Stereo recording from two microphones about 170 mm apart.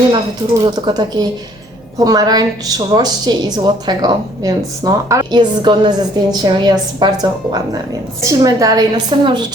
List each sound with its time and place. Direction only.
0.6 s a woman's voice: 25° right (ahead or behind)